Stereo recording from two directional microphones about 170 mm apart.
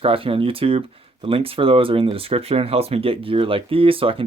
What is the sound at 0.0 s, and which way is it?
Speech, 35° right (ahead or behind).